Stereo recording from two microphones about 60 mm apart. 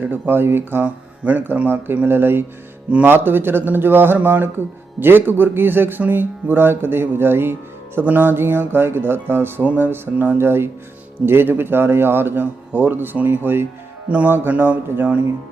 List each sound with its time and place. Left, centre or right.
0.0 s speech: right
0.9 s speech: right
10.3 s speech: right
14.1 s speech: right